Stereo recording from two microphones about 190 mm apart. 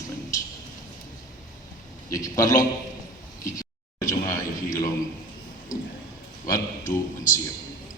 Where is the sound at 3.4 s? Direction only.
20° left (ahead or behind).